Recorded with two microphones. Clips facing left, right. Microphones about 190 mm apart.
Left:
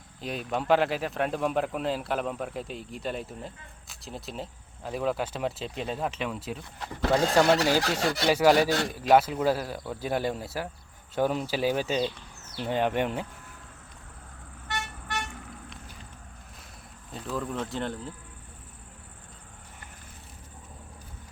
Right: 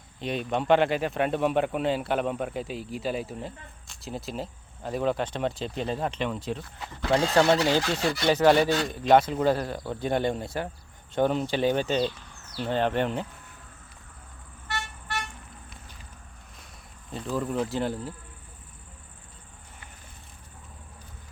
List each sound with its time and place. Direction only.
0.2 s a man's voice: centre (ahead or behind)
14.7 s vehicle: 20° left (ahead or behind)
17.1 s a man's voice: centre (ahead or behind)